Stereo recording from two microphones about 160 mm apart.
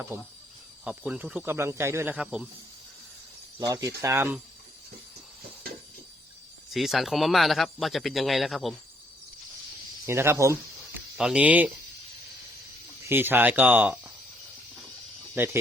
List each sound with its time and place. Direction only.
0.1 s a man's voice: 15° right (ahead or behind)
3.6 s a man's voice: 20° right (ahead or behind)
6.7 s speech: centre (ahead or behind)
10.1 s a man's voice: 15° right (ahead or behind)
11.2 s a man's voice: 5° right (ahead or behind)
13.1 s a man's voice: 15° right (ahead or behind)
15.4 s a man's voice: 15° right (ahead or behind)